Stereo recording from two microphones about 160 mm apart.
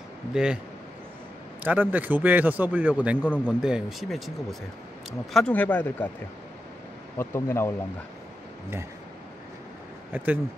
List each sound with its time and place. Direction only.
0.3 s speech: 5° right (ahead or behind)
1.6 s a man's voice: 10° right (ahead or behind); by 6.0 s 10° left (ahead or behind)
7.2 s speech: 15° left (ahead or behind)
10.1 s a man's voice: 10° right (ahead or behind)